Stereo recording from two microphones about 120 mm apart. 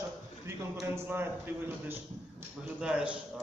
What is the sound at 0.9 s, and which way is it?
A man's voice, 20° right (ahead or behind).